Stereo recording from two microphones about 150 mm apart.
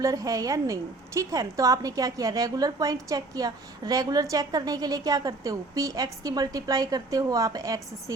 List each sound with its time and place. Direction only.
0.0 s a woman's voice: 25° right (ahead or behind)